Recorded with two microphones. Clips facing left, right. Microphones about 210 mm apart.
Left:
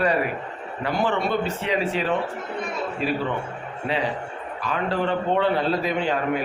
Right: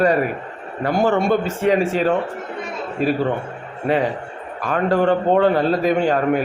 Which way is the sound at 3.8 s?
50° right (ahead or behind).